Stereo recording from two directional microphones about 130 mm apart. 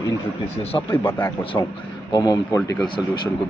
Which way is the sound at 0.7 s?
15° left (ahead or behind).